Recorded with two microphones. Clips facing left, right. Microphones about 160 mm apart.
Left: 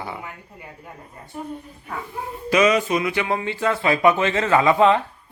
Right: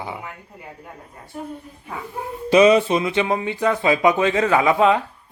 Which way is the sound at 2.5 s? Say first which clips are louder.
Right 4 dB; 30° right (ahead or behind).